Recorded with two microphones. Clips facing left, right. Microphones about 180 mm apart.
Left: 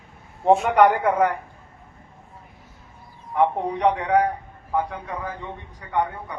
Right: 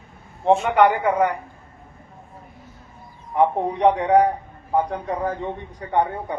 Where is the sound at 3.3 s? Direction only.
20° right (ahead or behind).